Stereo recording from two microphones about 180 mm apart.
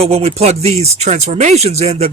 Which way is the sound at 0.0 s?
35° right (ahead or behind).